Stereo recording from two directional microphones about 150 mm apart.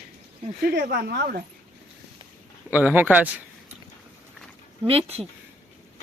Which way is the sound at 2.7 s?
10° right (ahead or behind).